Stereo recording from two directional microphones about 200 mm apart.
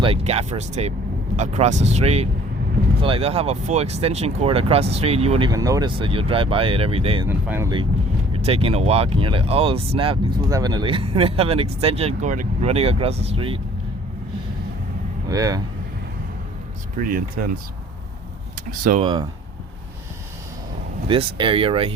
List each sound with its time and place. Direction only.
0.0 s speech: 30° right (ahead or behind)
5.5 s speech: 15° right (ahead or behind)
7.3 s speech: 10° right (ahead or behind)
8.3 s speech: 30° right (ahead or behind)
15.3 s speech: 15° right (ahead or behind)
17.0 s speech: 45° right (ahead or behind)
18.9 s speech: 25° right (ahead or behind)
21.1 s speech: 25° right (ahead or behind)